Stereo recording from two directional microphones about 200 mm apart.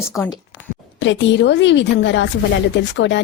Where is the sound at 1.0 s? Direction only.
65° left (ahead or behind).